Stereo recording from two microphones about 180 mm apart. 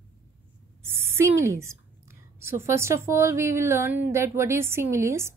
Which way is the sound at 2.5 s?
15° right (ahead or behind).